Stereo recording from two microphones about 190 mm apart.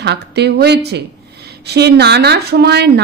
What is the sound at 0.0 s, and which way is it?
Speech, 60° right (ahead or behind).